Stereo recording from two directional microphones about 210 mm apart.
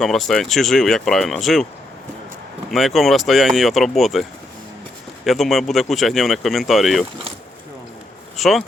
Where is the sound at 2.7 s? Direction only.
Centre (ahead or behind).